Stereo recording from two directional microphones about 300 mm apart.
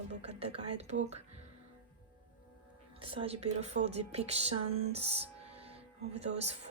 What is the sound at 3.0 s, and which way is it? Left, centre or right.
A woman's voice, centre.